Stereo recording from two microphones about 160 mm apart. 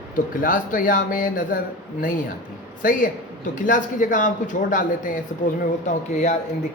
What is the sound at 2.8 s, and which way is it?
Speech, 55° left (ahead or behind).